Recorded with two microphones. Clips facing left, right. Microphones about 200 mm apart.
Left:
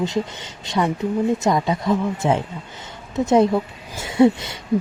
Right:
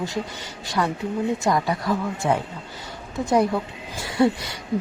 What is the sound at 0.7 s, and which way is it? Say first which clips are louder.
Speech: left 4 dB; 20° left (ahead or behind).